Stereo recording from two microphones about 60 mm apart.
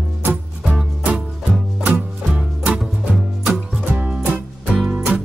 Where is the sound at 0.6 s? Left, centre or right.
Centre.